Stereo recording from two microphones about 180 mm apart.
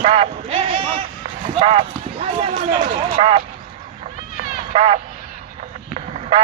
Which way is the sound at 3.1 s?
30° right (ahead or behind).